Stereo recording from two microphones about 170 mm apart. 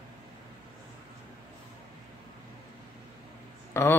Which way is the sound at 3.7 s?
15° left (ahead or behind).